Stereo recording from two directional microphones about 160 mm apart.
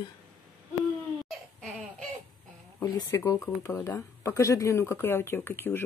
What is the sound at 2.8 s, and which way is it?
Speech, 25° left (ahead or behind).